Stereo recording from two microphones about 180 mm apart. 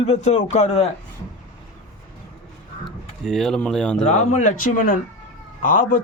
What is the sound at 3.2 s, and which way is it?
Speech, centre (ahead or behind).